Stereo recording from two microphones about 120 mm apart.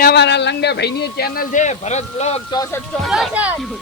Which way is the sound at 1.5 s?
80° left.